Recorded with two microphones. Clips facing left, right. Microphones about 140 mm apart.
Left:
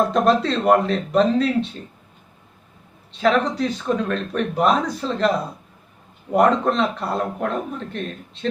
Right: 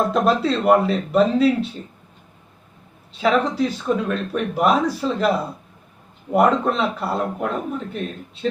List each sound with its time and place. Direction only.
0.1 s a man's voice: 5° right (ahead or behind)
3.2 s a man's voice: 5° right (ahead or behind)
6.3 s a man's voice: 5° right (ahead or behind)